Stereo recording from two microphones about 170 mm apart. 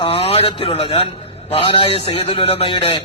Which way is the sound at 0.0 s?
35° left (ahead or behind).